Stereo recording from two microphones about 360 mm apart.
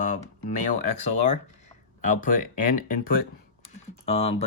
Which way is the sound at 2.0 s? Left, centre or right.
Left.